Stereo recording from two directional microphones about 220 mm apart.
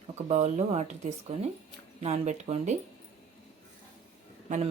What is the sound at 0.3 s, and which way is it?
Speech, 30° right (ahead or behind).